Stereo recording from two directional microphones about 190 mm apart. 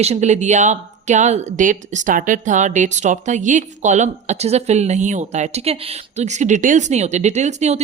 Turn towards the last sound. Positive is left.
turn(degrees=-35)  # may be behind; listen again after turning